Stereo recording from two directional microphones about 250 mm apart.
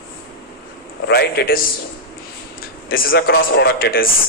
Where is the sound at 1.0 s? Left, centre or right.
Left.